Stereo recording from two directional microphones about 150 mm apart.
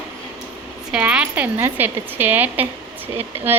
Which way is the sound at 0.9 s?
5° right (ahead or behind).